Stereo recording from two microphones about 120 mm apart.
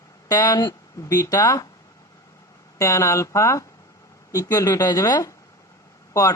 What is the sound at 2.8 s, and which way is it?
Speech, 25° left (ahead or behind).